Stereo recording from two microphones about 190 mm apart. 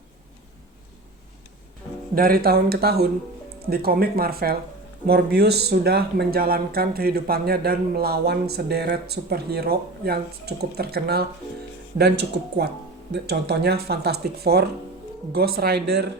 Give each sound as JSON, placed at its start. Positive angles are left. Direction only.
{"t": 2.1, "sound": "speech", "side_deg": -50}